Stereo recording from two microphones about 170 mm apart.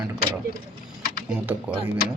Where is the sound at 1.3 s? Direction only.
10° right (ahead or behind).